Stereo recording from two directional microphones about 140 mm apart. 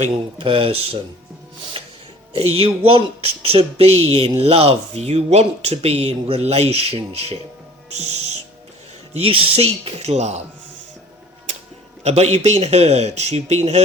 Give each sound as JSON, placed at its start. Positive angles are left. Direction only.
{"t": 0.3, "sound": "speech", "side_deg": -40}
{"t": 1.7, "sound": "a sound", "side_deg": -40}
{"t": 2.3, "sound": "speech", "side_deg": -45}
{"t": 9.2, "sound": "speech", "side_deg": -40}
{"t": 12.0, "sound": "speech", "side_deg": -50}